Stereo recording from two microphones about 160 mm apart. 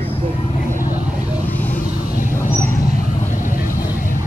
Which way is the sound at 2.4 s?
55° left (ahead or behind).